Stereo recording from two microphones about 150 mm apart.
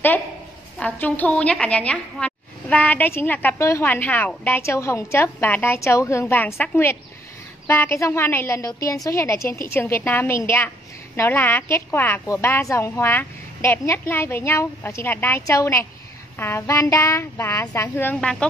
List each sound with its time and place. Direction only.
0.7 s a woman's voice: 10° left (ahead or behind)